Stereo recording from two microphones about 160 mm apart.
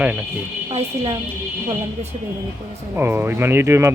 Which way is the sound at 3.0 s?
15° right (ahead or behind).